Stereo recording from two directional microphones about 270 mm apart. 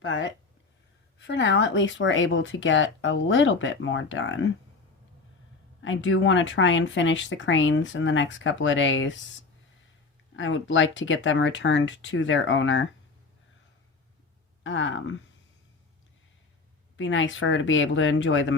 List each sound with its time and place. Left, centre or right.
0.0 s speech: left
5.8 s speech: left
10.3 s speech: left
14.6 s speech: left
17.0 s speech: left